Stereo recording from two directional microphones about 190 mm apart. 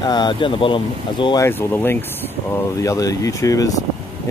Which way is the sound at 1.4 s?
10° left (ahead or behind).